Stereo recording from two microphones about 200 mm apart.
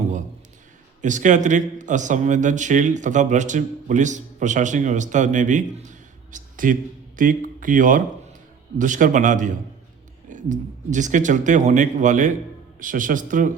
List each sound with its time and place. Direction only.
1.0 s a man's voice: 40° right (ahead or behind)